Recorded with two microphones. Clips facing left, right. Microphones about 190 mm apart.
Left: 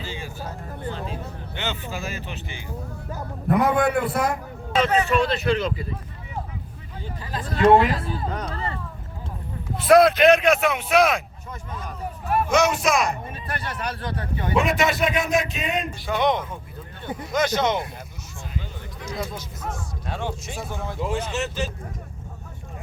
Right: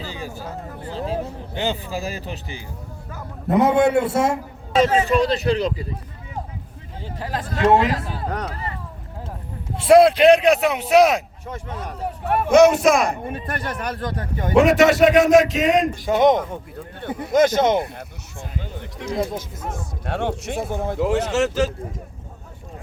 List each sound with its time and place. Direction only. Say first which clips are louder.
0.0 s a sound: right 2 dB; 40° right (ahead or behind)
0.9 s speech: right 6 dB; 35° right (ahead or behind)
3.5 s a man's voice: right 4 dB; 25° right (ahead or behind)
7.0 s a man's voice: right 4 dB; 90° right
9.7 s speech: right 3 dB; 30° right (ahead or behind)
11.4 s speech: right 4 dB; 80° right; by 14.5 s 45° right (ahead or behind)
14.5 s a man's voice: right 8 dB; 80° right
16.0 s speech: right 5 dB; 45° right (ahead or behind)
20.1 s speech: right 6 dB; 70° right (ahead or behind)
21.0 s a man's voice: right 7 dB; 75° right (ahead or behind)